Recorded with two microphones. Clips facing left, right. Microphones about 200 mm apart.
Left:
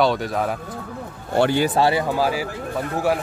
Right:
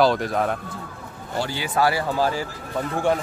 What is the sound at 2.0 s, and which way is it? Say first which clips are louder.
Speech: left 2 dB; 10° left (ahead or behind).